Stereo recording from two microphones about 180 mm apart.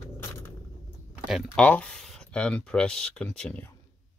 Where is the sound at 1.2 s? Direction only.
Centre (ahead or behind).